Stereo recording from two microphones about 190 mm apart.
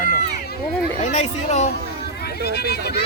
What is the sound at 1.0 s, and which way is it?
Speech, 35° left (ahead or behind).